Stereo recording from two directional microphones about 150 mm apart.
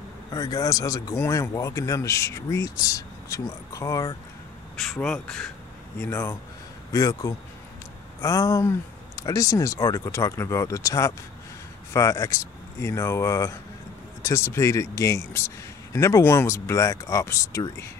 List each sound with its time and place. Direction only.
0.3 s speech: 25° left (ahead or behind)
4.7 s speech: 5° left (ahead or behind)
5.9 s speech: 15° left (ahead or behind)